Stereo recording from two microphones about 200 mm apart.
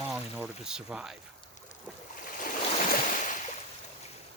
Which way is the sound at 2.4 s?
40° left (ahead or behind).